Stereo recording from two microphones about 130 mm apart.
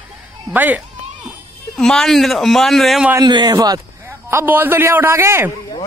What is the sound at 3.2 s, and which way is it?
Speech, 35° right (ahead or behind).